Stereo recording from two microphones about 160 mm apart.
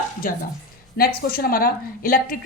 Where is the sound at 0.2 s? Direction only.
60° left (ahead or behind).